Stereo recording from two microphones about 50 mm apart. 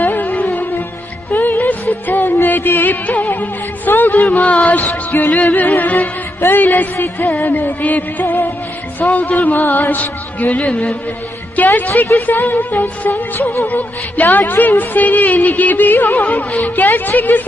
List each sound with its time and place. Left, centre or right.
0.0 s music: left
2.2 s music: left
4.5 s music: left
6.4 s speech: left
13.4 s music: left
13.7 s speech: left
14.2 s speech: left